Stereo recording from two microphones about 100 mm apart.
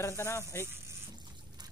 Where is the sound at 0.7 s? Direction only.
25° right (ahead or behind).